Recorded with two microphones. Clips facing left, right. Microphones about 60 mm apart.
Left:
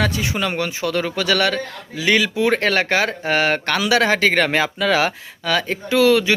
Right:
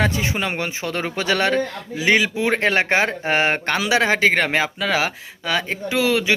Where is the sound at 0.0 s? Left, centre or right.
Right.